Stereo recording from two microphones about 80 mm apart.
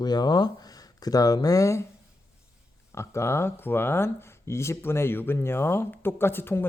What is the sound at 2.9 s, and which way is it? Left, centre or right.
Speech, left.